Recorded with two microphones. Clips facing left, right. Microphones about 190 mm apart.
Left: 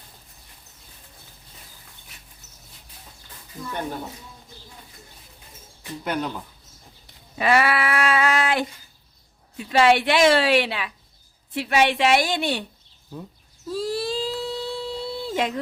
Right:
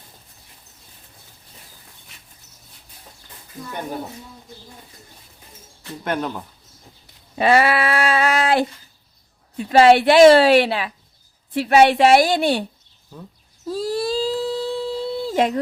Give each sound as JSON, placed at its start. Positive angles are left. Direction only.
{"t": 7.3, "sound": "child singing", "side_deg": -30}
{"t": 9.6, "sound": "a woman's voice", "side_deg": -40}
{"t": 13.7, "sound": "a sound", "side_deg": -40}